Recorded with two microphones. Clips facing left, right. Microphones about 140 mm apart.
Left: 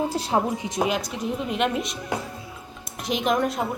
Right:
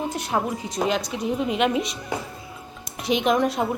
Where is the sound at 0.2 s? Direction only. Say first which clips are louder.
Left 2 dB; 25° left (ahead or behind).